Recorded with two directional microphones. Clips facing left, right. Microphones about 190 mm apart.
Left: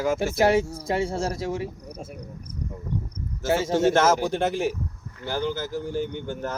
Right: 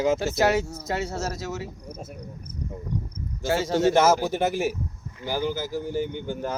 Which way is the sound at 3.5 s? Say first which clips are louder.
Left 1 dB; 25° left (ahead or behind).